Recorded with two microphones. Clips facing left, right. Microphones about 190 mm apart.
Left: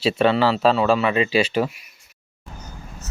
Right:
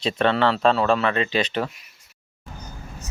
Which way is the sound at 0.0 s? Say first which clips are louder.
Left 2 dB; 5° left (ahead or behind).